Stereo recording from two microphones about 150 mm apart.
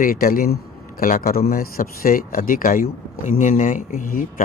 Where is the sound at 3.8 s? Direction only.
70° left (ahead or behind).